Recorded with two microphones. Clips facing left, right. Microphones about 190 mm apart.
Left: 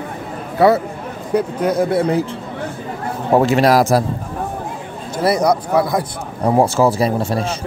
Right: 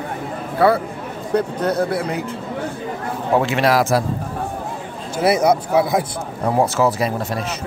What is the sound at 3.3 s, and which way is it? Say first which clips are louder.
Speech: left 4 dB; 40° left (ahead or behind).